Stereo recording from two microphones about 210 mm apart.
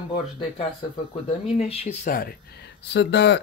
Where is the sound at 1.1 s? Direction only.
30° left (ahead or behind).